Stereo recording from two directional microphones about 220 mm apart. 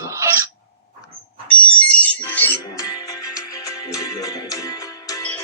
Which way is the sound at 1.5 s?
5° left (ahead or behind).